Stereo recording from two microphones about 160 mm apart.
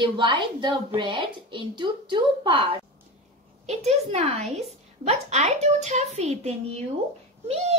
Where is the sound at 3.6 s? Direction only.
45° right (ahead or behind).